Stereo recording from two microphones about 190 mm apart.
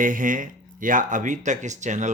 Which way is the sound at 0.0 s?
45° right (ahead or behind).